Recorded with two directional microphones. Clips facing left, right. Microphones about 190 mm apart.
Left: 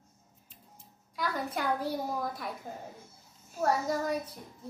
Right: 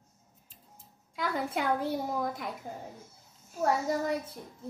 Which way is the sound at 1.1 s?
25° right (ahead or behind).